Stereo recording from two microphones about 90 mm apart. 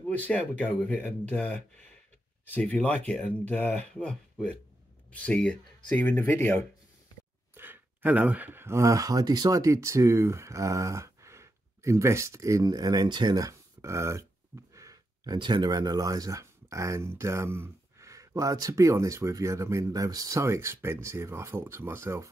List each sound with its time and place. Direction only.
0.2 s speech: 15° left (ahead or behind)
7.5 s speech: 20° right (ahead or behind)
15.3 s speech: 55° right (ahead or behind); by 22.3 s 30° right (ahead or behind)